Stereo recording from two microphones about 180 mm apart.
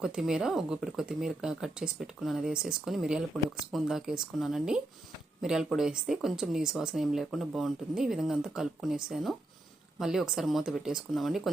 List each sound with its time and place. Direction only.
0.0 s speech: 5° right (ahead or behind)